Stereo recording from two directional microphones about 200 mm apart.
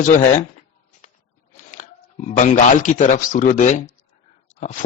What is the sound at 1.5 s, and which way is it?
Speech, 40° left (ahead or behind).